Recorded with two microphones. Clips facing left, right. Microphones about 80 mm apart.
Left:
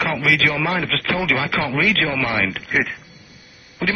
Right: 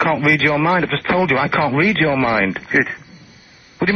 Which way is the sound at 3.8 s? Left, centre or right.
Right.